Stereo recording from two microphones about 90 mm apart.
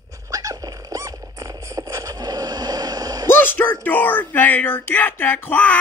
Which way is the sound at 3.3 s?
25° left (ahead or behind).